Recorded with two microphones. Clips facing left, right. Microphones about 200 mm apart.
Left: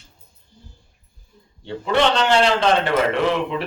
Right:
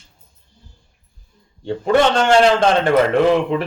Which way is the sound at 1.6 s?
45° right (ahead or behind).